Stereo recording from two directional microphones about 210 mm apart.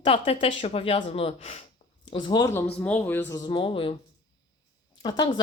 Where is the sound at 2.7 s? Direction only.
5° left (ahead or behind); by 3.9 s 25° left (ahead or behind).